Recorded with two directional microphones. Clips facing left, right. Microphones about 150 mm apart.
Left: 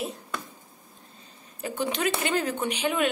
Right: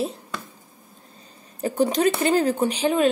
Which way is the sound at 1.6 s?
40° right (ahead or behind).